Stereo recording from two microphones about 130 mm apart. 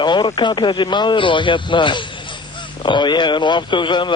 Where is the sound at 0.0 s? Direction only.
35° left (ahead or behind).